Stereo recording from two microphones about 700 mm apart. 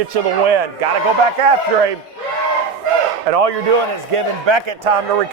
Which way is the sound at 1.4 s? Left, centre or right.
Right.